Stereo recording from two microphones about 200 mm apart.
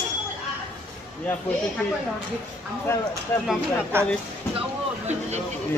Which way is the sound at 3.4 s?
10° right (ahead or behind).